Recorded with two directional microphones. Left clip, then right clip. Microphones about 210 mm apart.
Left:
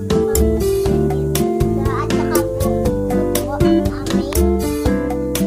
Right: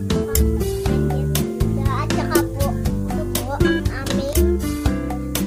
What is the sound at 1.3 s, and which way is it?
Music, centre (ahead or behind).